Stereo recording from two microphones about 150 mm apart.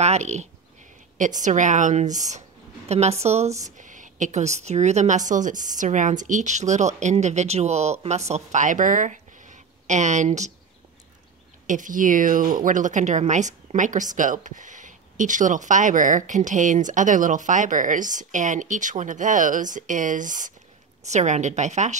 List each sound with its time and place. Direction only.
0.0 s a woman's voice: 50° right (ahead or behind)
3.6 s a woman's voice: 55° right (ahead or behind)
11.6 s a woman's voice: 60° right (ahead or behind)